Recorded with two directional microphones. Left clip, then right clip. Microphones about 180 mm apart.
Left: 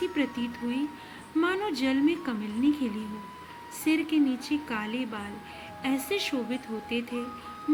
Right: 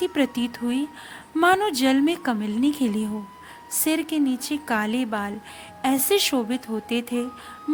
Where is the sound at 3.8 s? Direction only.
60° right (ahead or behind).